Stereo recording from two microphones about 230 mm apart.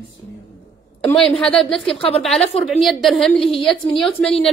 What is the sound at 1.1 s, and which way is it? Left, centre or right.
A woman's voice, centre.